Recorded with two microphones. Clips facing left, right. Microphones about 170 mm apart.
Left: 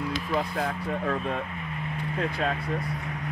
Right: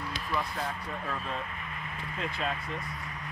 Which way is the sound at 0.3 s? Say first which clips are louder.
Left 4 dB; 55° left (ahead or behind).